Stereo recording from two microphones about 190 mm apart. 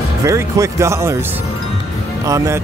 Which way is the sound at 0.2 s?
15° right (ahead or behind).